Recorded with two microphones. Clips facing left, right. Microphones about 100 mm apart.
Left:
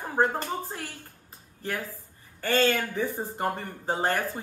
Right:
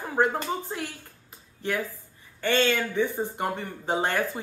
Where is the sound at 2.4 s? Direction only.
40° left (ahead or behind).